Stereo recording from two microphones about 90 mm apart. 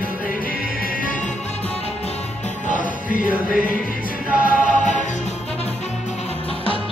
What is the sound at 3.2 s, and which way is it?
Music, 15° right (ahead or behind).